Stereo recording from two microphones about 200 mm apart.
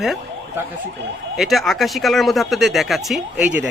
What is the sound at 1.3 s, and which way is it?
Speech, centre (ahead or behind).